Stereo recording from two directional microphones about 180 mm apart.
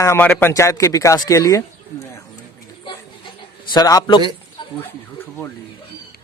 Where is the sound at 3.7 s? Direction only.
20° left (ahead or behind).